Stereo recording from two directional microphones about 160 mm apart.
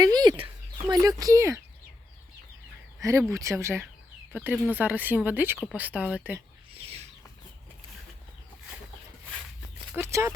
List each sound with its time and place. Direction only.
0.0 s chicken: 25° right (ahead or behind)
0.4 s speech: 25° right (ahead or behind)
3.0 s speech: 20° right (ahead or behind)
6.7 s a sound: 40° right (ahead or behind)
9.9 s speech: 15° right (ahead or behind)